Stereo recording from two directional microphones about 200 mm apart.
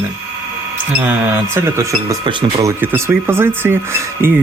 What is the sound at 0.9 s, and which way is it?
Speech, 10° right (ahead or behind).